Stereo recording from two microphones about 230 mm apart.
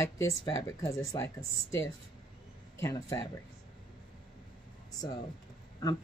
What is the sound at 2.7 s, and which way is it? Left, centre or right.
Speech, centre.